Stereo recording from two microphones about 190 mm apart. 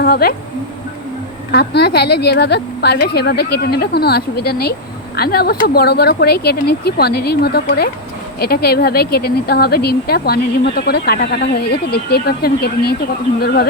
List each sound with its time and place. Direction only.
0.0 s speech: 55° left (ahead or behind)
1.5 s speech: 60° left (ahead or behind)